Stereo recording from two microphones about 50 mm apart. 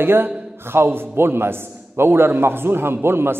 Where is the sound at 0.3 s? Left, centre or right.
Centre.